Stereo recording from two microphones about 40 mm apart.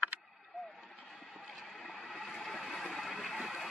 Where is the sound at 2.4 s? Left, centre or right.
Centre.